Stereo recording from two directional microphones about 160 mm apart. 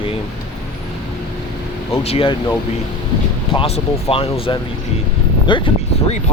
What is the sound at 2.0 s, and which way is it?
Speech, 35° left (ahead or behind).